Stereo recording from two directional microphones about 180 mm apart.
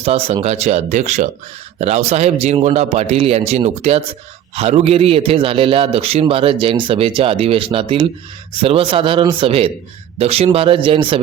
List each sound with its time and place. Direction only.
0.0 s a man's voice: 35° right (ahead or behind)